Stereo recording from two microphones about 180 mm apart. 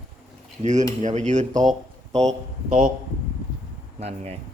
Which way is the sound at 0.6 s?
40° right (ahead or behind).